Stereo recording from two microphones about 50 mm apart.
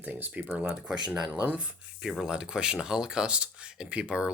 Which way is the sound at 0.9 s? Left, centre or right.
Centre.